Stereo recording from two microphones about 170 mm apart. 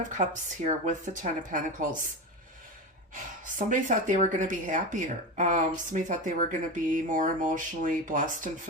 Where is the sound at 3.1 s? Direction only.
50° right (ahead or behind).